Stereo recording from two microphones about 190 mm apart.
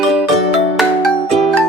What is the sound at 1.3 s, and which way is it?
Music, centre (ahead or behind).